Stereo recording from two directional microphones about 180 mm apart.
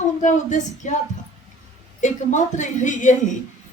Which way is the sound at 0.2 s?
45° left (ahead or behind).